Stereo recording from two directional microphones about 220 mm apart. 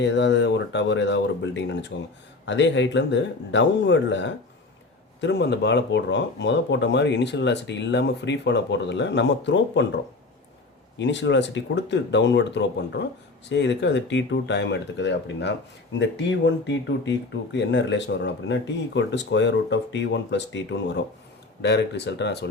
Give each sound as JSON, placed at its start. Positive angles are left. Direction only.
{"t": 0.0, "sound": "speech", "side_deg": 55}